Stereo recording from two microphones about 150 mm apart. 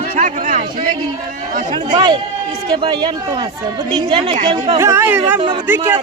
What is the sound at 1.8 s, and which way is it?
Speech, 30° right (ahead or behind).